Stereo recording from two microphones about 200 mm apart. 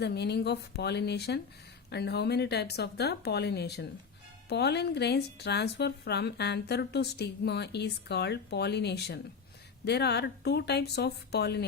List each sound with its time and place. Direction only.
0.0 s speech: 55° left (ahead or behind)